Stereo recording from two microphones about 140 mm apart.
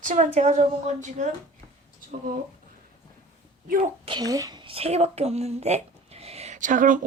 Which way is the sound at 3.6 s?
85° right.